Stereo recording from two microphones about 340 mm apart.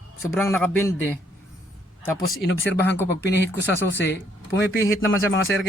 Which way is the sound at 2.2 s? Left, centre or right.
Left.